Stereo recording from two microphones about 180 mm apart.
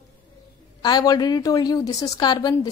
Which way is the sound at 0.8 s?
20° left (ahead or behind).